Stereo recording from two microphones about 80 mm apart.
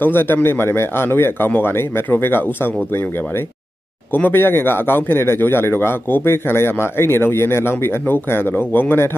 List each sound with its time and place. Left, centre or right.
0.0 s speech: left